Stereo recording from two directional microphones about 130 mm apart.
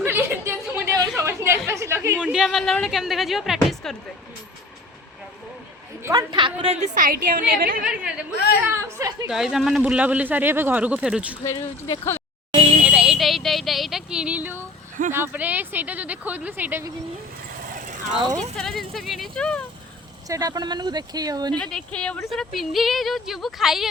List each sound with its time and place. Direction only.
0.0 s chatter: 20° right (ahead or behind)
2.2 s speech: 5° right (ahead or behind)
6.0 s a woman's voice: 20° right (ahead or behind)
6.3 s a woman's voice: 40° right (ahead or behind)
6.9 s a woman's voice: 90° right
8.7 s a woman's voice: 25° right (ahead or behind)
9.3 s speech: 5° right (ahead or behind)
11.4 s speech: 20° left (ahead or behind)
12.5 s music: 50° right (ahead or behind)
12.8 s a sound: 5° right (ahead or behind)
15.1 s speech: 15° right (ahead or behind)
18.5 s speech: 5° left (ahead or behind)
20.2 s speech: 25° right (ahead or behind)
21.6 s speech: 5° left (ahead or behind)